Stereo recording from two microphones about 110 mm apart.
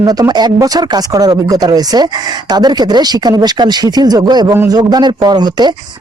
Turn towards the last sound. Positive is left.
turn(degrees=-40)  # may be behind; listen again after turning